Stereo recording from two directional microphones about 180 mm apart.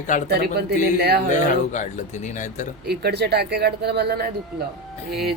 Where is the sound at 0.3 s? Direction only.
65° right (ahead or behind).